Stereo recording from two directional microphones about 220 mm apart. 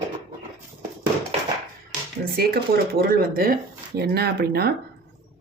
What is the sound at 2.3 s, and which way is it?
Speech, 45° right (ahead or behind).